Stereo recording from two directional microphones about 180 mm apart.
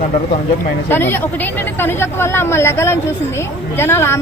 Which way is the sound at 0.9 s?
10° left (ahead or behind).